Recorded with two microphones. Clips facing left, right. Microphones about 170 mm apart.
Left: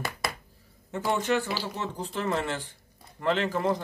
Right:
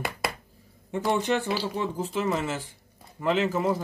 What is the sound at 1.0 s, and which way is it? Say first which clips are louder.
Speech: right 1 dB; 20° right (ahead or behind).